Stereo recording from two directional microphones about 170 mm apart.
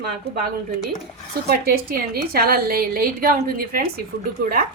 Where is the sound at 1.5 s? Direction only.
65° right (ahead or behind).